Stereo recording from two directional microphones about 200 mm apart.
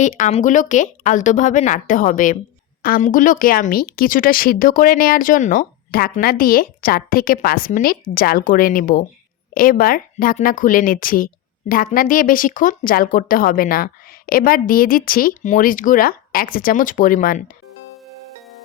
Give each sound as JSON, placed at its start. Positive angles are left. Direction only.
{"t": 0.0, "sound": "a woman's voice", "side_deg": 40}